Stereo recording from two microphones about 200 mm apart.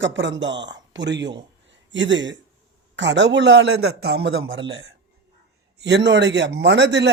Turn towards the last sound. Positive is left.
turn(degrees=-60)  # may be behind; listen again after turning